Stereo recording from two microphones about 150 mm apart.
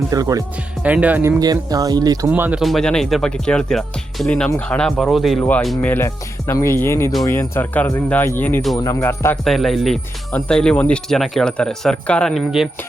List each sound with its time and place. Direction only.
0.1 s speech: 25° right (ahead or behind)
0.8 s speech: 10° right (ahead or behind)
1.4 s speech: 25° right (ahead or behind)
2.3 s speech: 10° right (ahead or behind)
5.4 s speech: 10° left (ahead or behind)
5.6 s speech: centre (ahead or behind)
5.9 s speech: 15° left (ahead or behind)
9.4 s speech: centre (ahead or behind)